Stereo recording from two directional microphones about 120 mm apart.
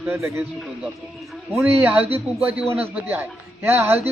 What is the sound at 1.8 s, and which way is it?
Speech, 10° right (ahead or behind).